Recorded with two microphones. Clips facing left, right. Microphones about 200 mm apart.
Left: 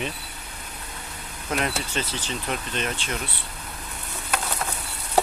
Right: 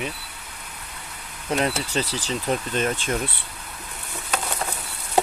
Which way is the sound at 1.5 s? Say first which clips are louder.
Right 3 dB; 30° right (ahead or behind).